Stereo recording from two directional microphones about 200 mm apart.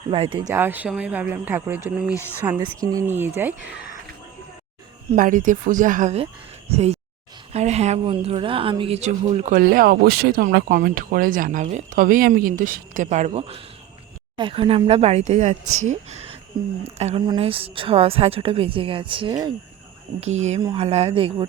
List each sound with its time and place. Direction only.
0.1 s a woman's voice: 25° right (ahead or behind)
0.5 s speech: 10° right (ahead or behind)
5.1 s speech: 40° right (ahead or behind)
9.6 s a woman's voice: 45° right (ahead or behind); by 19.5 s 20° right (ahead or behind)
20.6 s a woman's voice: 25° right (ahead or behind)